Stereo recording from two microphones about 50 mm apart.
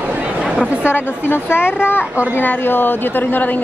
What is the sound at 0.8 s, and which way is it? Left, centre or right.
A woman's voice, left.